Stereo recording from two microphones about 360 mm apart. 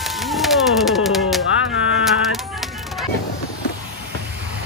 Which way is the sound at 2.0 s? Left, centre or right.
Centre.